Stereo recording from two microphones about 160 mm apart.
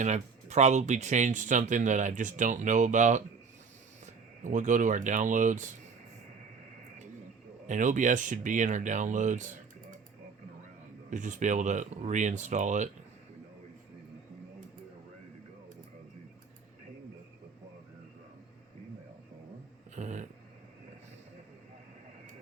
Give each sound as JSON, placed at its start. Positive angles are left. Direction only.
{"t": 0.0, "sound": "speech", "side_deg": -45}
{"t": 7.7, "sound": "speech", "side_deg": -50}
{"t": 11.1, "sound": "speech", "side_deg": -50}
{"t": 20.0, "sound": "dog", "side_deg": -50}